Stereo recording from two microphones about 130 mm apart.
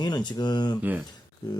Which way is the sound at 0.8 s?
10° right (ahead or behind).